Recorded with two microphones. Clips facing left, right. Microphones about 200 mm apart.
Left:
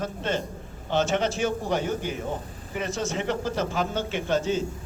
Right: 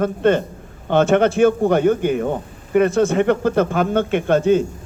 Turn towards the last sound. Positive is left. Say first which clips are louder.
# right 10 dB
turn(degrees=-55)  # may be behind; listen again after turning